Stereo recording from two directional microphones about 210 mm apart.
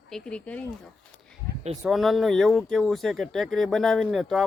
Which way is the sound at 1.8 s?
Centre (ahead or behind).